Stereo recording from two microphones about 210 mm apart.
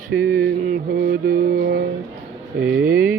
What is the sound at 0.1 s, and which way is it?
Music, 45° right (ahead or behind).